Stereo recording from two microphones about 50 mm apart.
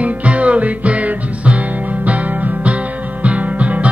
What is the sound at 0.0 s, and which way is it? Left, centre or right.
Music, right.